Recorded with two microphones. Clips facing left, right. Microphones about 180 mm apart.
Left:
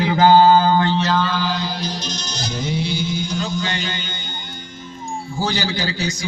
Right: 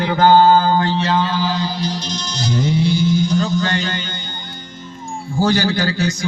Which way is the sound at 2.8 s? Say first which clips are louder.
Right 7 dB; 55° right (ahead or behind).